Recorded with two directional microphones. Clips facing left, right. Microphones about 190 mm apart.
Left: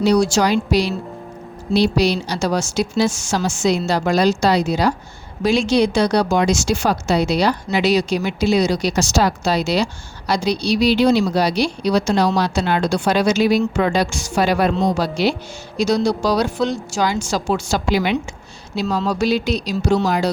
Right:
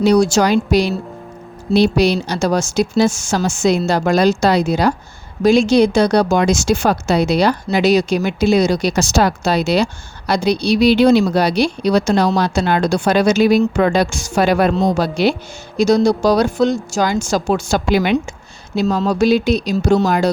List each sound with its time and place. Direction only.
0.0 s a woman's voice: 50° right (ahead or behind)